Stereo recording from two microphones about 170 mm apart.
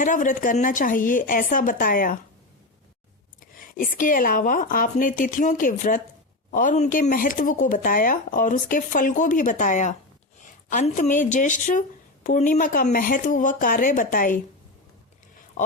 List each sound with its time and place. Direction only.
0.0 s a woman's voice: 50° left (ahead or behind)
3.4 s a woman's voice: 55° left (ahead or behind)
15.6 s speech: 50° left (ahead or behind)